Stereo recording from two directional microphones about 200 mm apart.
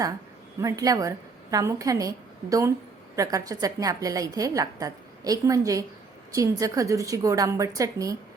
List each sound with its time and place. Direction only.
0.6 s a woman's voice: 15° right (ahead or behind)